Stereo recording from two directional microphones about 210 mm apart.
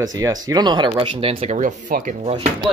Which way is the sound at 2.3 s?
25° right (ahead or behind).